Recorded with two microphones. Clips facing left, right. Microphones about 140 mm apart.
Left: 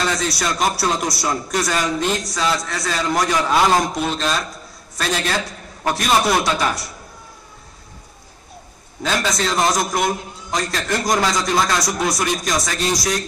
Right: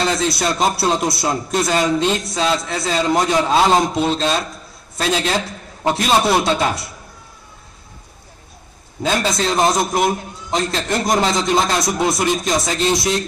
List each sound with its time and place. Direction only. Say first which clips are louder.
0.0 s speech: right 3 dB; 25° right (ahead or behind)
9.0 s speech: right 2 dB; 25° right (ahead or behind)